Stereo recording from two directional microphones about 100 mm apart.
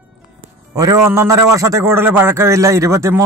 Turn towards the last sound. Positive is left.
turn(degrees=-30)  # may be behind; listen again after turning